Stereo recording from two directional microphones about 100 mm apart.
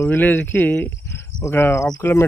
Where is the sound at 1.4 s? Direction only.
25° left (ahead or behind).